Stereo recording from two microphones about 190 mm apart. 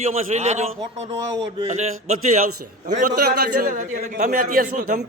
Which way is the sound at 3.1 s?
55° right (ahead or behind).